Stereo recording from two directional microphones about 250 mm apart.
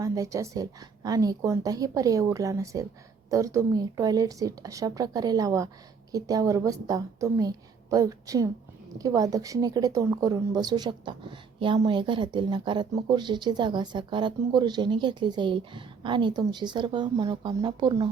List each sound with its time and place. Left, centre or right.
0.0 s a woman's voice: centre